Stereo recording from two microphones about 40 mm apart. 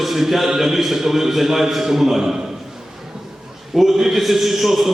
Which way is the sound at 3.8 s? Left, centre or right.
Centre.